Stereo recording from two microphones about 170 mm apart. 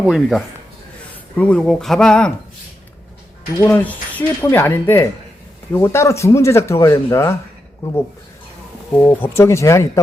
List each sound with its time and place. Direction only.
0.0 s speech: centre (ahead or behind)
3.6 s speech: 10° left (ahead or behind)
9.0 s speech: 15° left (ahead or behind)